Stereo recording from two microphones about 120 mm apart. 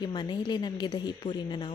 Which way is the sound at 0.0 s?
35° left (ahead or behind).